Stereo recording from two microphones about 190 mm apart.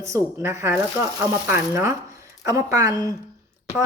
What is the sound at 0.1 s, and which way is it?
A woman's voice, 15° right (ahead or behind).